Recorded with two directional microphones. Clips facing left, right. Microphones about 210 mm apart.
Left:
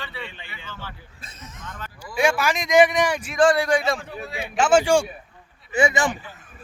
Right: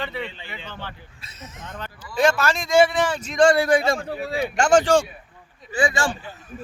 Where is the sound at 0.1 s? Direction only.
20° right (ahead or behind).